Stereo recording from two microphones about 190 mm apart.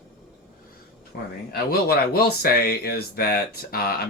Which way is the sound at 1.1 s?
55° left (ahead or behind).